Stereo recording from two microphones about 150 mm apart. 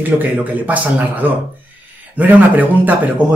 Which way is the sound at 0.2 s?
10° right (ahead or behind).